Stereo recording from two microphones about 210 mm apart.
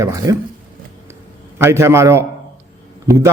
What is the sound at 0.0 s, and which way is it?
Speech, 15° right (ahead or behind).